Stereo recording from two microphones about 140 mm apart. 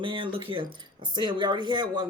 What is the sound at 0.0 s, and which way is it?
Speech, 35° right (ahead or behind).